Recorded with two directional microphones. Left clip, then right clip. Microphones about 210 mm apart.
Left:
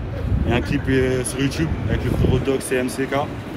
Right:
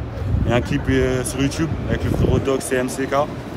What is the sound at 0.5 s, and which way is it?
Speech, 10° right (ahead or behind).